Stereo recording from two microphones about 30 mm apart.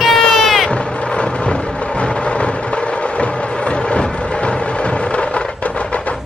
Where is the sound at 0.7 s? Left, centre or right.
Left.